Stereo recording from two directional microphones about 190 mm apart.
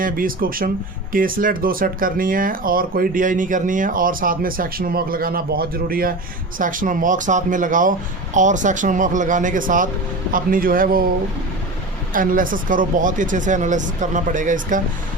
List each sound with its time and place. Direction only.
0.0 s speech: 45° right (ahead or behind)
12.1 s speech: 45° right (ahead or behind)